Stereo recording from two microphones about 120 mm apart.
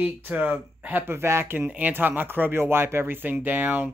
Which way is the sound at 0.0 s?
15° right (ahead or behind).